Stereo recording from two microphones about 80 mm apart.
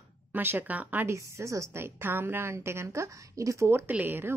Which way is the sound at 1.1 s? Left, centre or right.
Right.